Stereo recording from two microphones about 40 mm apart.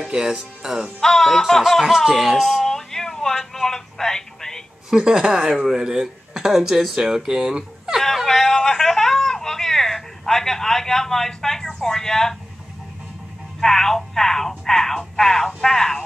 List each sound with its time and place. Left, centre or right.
0.0 s speech: centre
1.0 s speech: centre
2.0 s speech: centre
2.6 s a sound: centre
4.8 s a woman's voice: centre
8.3 s a sound: centre
13.6 s speech: centre